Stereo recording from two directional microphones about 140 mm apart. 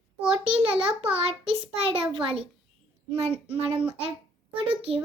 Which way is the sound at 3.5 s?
40° right (ahead or behind).